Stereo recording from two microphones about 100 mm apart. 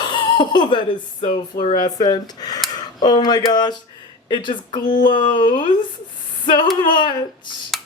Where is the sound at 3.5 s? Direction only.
45° left (ahead or behind).